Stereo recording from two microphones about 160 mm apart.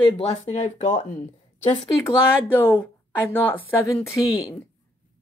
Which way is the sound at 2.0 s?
15° left (ahead or behind).